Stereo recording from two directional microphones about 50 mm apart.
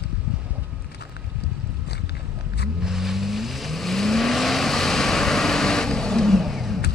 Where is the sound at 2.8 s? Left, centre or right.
Centre.